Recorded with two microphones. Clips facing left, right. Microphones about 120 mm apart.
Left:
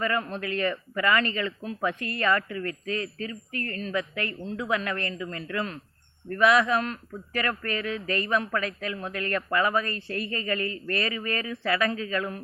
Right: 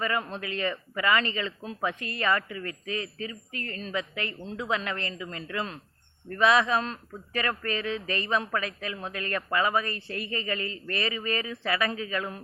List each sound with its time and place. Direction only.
0.0 s speech: 20° right (ahead or behind)